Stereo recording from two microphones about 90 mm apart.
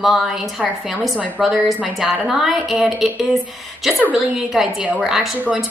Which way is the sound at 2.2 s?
5° right (ahead or behind).